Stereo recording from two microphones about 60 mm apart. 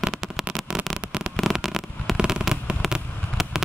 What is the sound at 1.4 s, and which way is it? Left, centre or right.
Fireworks, centre.